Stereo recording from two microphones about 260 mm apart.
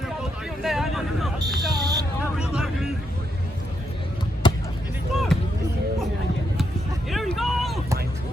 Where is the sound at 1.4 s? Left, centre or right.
Centre.